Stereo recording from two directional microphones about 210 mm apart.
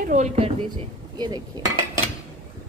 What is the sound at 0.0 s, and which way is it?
Speech, 35° right (ahead or behind).